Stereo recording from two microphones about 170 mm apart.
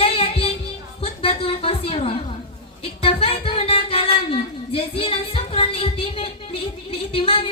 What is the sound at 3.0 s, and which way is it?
Music, 35° left (ahead or behind).